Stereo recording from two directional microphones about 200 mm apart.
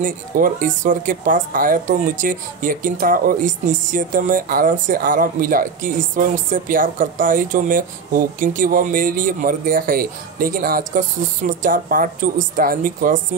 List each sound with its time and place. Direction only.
0.0 s speech: 40° right (ahead or behind)